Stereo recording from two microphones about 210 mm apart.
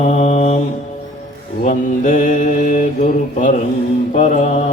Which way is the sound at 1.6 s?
35° left (ahead or behind).